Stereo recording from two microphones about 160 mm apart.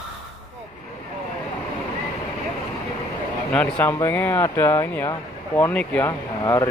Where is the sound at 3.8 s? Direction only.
15° left (ahead or behind).